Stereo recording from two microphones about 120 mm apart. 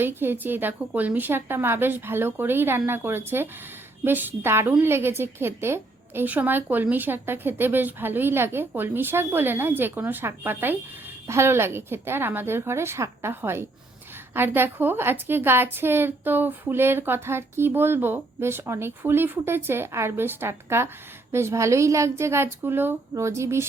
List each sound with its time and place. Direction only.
0.0 s a woman's voice: 20° right (ahead or behind)